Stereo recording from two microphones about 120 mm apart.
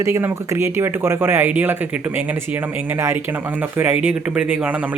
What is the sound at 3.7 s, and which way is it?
Speech, 15° right (ahead or behind).